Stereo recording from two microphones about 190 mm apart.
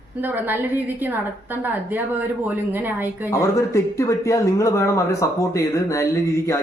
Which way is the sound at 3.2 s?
15° left (ahead or behind).